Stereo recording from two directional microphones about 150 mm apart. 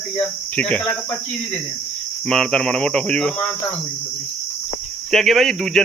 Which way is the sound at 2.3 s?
5° left (ahead or behind).